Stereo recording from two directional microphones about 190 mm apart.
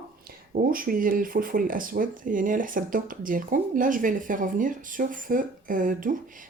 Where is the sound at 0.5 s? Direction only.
50° right (ahead or behind).